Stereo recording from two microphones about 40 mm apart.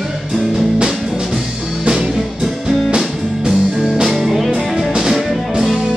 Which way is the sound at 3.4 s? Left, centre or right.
Centre.